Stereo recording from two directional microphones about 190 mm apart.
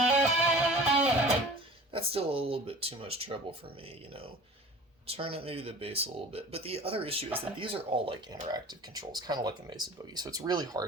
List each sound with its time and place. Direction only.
0.0 s music: 5° right (ahead or behind)
1.9 s speech: 30° right (ahead or behind)
5.0 s speech: 30° right (ahead or behind)